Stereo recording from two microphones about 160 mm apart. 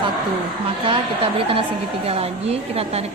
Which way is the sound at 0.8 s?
35° right (ahead or behind).